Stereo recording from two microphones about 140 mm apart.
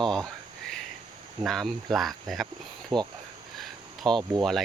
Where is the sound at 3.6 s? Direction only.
Centre (ahead or behind).